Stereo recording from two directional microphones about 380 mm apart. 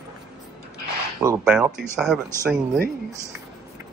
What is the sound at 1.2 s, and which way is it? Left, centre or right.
Speech, centre.